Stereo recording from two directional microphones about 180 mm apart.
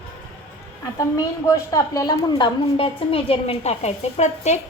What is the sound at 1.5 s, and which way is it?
A woman's voice, 20° left (ahead or behind).